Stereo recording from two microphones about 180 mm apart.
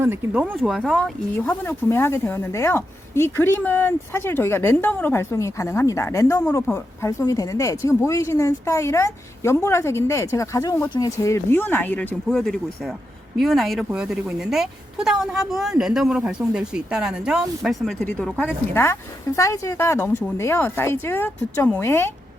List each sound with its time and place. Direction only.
0.5 s a woman's voice: centre (ahead or behind)